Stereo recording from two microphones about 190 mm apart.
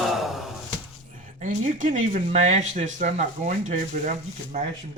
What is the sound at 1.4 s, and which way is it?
Speech, 40° right (ahead or behind).